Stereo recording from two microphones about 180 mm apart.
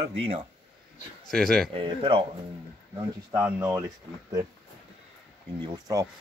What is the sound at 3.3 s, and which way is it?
Speech, 10° right (ahead or behind).